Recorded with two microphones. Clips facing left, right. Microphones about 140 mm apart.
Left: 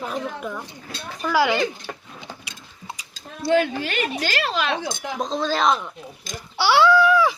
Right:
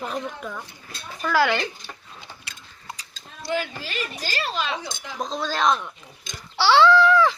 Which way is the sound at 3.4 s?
55° left (ahead or behind).